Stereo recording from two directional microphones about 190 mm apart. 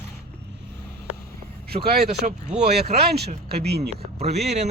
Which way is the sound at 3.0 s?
60° right (ahead or behind).